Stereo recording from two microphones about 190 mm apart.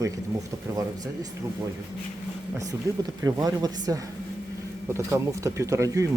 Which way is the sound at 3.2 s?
20° right (ahead or behind).